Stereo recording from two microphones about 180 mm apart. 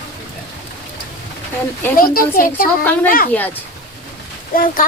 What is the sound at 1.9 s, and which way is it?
Speech, 55° left (ahead or behind).